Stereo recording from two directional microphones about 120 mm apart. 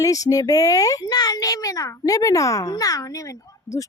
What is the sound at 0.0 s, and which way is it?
A child's voice, 30° left (ahead or behind).